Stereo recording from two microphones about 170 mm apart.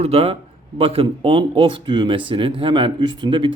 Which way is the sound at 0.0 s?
35° right (ahead or behind).